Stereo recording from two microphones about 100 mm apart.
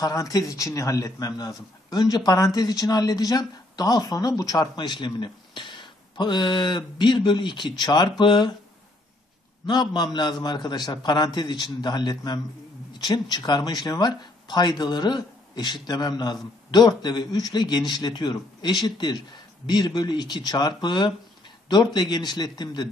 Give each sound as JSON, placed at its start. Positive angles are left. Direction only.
{"t": 0.0, "sound": "speech", "side_deg": 35}
{"t": 9.7, "sound": "speech", "side_deg": 45}